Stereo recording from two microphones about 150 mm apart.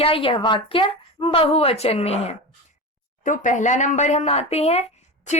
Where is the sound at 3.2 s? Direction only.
60° left (ahead or behind).